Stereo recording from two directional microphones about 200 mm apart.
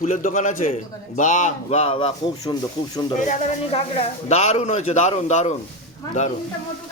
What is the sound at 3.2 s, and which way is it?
A man's voice, 40° left (ahead or behind).